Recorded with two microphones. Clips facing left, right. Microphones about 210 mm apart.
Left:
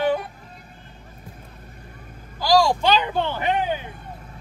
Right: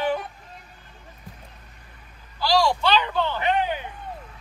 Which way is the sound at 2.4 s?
45° left (ahead or behind).